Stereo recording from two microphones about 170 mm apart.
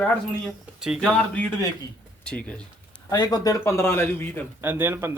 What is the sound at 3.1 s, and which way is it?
A man's voice, 25° left (ahead or behind).